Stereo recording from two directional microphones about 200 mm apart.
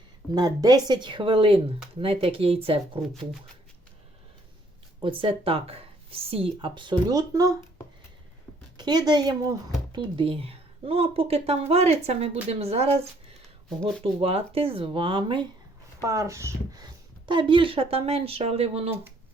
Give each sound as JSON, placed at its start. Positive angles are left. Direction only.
{"t": 0.3, "sound": "speech", "side_deg": -20}
{"t": 4.9, "sound": "speech", "side_deg": -25}
{"t": 8.8, "sound": "speech", "side_deg": -20}
{"t": 14.0, "sound": "speech", "side_deg": -30}